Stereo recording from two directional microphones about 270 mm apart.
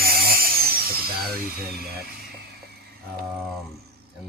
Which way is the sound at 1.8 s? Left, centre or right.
Right.